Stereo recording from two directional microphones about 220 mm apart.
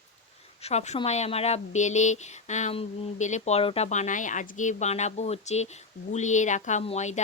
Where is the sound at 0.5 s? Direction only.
30° left (ahead or behind).